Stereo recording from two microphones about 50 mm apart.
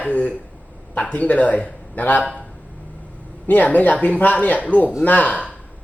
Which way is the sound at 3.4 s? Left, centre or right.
Left.